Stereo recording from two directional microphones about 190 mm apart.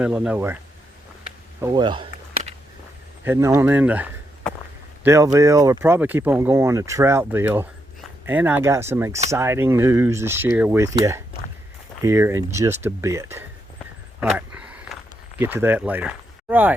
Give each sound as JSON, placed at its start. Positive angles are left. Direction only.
{"t": 0.0, "sound": "speech", "side_deg": -5}
{"t": 1.6, "sound": "speech", "side_deg": -25}
{"t": 3.2, "sound": "speech", "side_deg": -15}
{"t": 14.2, "sound": "walk", "side_deg": -5}
{"t": 15.4, "sound": "speech", "side_deg": -10}